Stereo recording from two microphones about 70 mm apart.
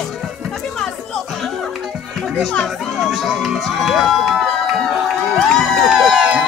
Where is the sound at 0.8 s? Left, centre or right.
Centre.